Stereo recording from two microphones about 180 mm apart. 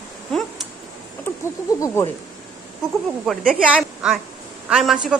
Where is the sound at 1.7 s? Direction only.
20° left (ahead or behind).